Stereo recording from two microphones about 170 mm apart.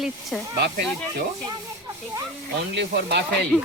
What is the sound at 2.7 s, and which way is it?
Speech, 80° right.